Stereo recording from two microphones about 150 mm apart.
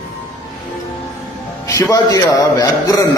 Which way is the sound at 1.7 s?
25° left (ahead or behind).